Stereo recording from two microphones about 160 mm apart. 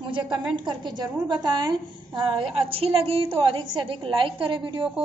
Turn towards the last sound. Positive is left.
turn(degrees=-30)  # may be behind; listen again after turning